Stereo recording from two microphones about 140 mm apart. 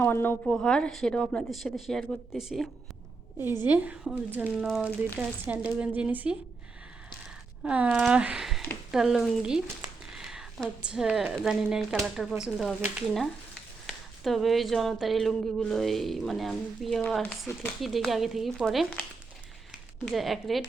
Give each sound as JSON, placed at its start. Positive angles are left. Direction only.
{"t": 0.0, "sound": "speech", "side_deg": 15}
{"t": 0.4, "sound": "speech", "side_deg": 5}
{"t": 3.7, "sound": "speech", "side_deg": -10}
{"t": 7.6, "sound": "speech", "side_deg": -10}
{"t": 13.8, "sound": "speech", "side_deg": 0}
{"t": 20.1, "sound": "speech", "side_deg": 0}